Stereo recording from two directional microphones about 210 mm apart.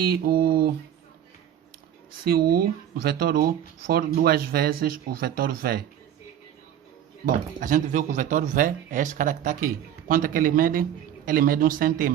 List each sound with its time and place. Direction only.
0.0 s speech: 45° right (ahead or behind)
2.9 s speech: 45° right (ahead or behind)
7.3 s speech: 40° right (ahead or behind)